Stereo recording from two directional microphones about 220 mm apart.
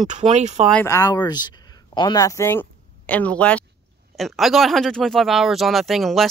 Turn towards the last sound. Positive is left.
turn(degrees=0)  # may be behind; listen again after turning